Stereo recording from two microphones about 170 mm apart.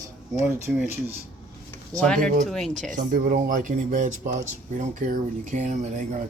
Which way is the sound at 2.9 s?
50° right (ahead or behind).